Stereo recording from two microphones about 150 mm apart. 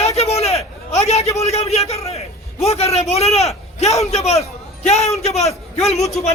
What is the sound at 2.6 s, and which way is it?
Speech, 45° left (ahead or behind).